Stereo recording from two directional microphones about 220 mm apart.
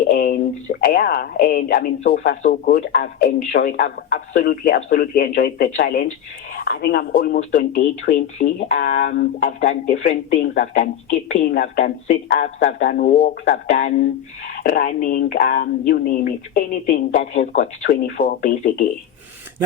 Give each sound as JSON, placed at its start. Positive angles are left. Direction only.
{"t": 0.1, "sound": "speech", "side_deg": 40}
{"t": 17.3, "sound": "speech", "side_deg": 30}